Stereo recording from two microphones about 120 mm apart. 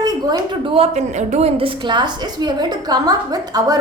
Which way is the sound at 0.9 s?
75° right (ahead or behind).